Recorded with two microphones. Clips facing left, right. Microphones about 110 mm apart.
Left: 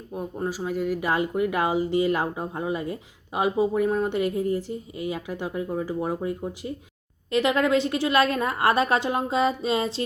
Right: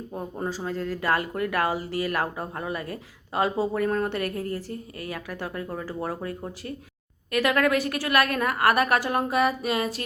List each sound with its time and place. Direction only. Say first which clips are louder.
0.4 s speech: left 3 dB; 10° left (ahead or behind); by 10.0 s 25° left (ahead or behind)